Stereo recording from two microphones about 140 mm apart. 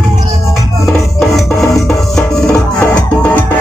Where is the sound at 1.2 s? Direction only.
Centre (ahead or behind).